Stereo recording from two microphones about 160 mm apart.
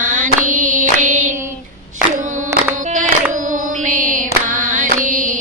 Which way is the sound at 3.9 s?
50° right (ahead or behind).